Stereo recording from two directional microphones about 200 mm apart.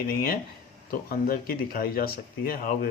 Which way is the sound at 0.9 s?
50° left (ahead or behind).